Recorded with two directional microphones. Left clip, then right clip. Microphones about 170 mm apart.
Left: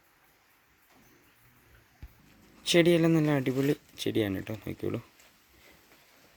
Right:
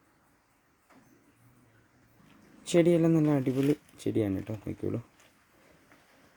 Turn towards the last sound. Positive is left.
turn(degrees=-5)  # may be behind; listen again after turning